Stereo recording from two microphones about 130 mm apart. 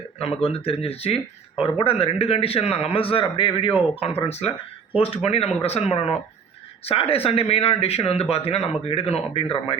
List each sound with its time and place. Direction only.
0.2 s a man's voice: 50° left (ahead or behind)